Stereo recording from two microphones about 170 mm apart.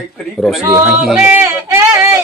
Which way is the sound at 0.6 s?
10° right (ahead or behind).